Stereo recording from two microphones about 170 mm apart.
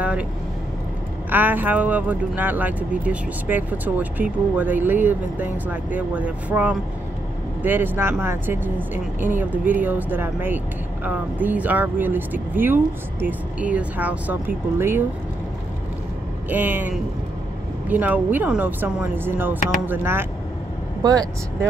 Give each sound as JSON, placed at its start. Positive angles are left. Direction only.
{"t": 1.3, "sound": "speech", "side_deg": -10}
{"t": 16.4, "sound": "speech", "side_deg": -10}